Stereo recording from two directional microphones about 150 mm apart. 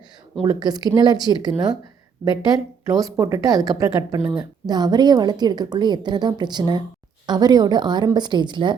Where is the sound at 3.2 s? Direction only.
20° right (ahead or behind).